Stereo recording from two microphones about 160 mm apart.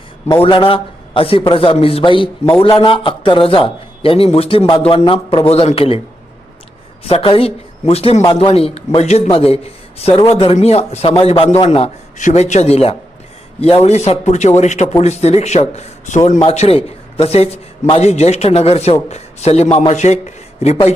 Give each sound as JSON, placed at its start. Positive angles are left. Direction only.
{"t": 0.4, "sound": "a man's voice", "side_deg": 35}
{"t": 7.0, "sound": "a man's voice", "side_deg": 35}